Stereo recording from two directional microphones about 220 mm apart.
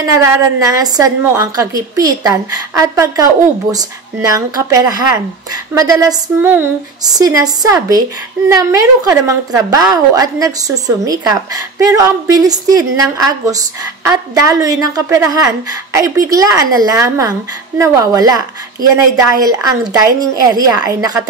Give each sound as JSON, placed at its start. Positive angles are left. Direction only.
{"t": 0.0, "sound": "a woman's voice", "side_deg": -15}